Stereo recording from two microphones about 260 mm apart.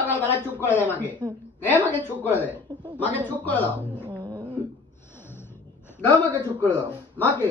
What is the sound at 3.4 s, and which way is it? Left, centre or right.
Speech, centre.